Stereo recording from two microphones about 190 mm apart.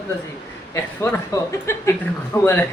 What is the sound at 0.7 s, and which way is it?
Speech, 15° left (ahead or behind).